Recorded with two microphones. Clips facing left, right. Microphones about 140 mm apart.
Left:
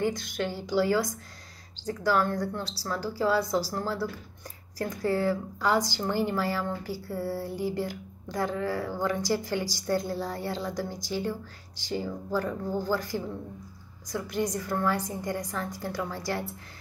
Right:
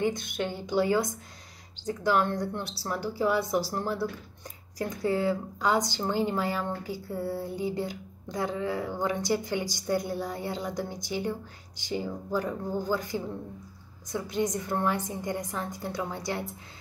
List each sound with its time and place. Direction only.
0.0 s speech: 20° right (ahead or behind)